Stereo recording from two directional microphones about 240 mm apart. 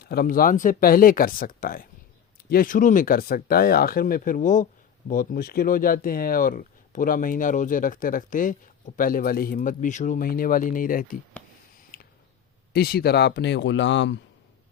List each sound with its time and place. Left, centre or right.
0.0 s speech: left
11.9 s a sound: left
12.7 s speech: left